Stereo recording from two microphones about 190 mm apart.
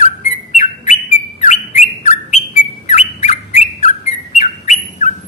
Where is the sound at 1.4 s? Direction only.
40° left (ahead or behind).